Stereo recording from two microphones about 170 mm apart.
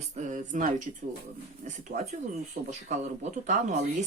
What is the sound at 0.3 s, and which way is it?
Speech, 50° right (ahead or behind).